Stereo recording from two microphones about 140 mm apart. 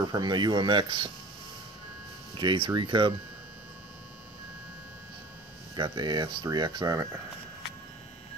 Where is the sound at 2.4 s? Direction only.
35° right (ahead or behind).